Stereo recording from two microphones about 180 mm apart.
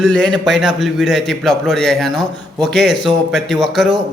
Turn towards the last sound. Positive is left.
turn(degrees=0)  # may be behind; listen again after turning